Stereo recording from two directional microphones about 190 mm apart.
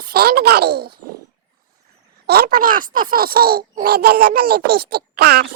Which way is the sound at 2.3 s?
55° right (ahead or behind).